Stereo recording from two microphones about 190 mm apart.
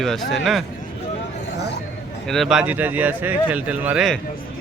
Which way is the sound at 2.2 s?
Centre (ahead or behind).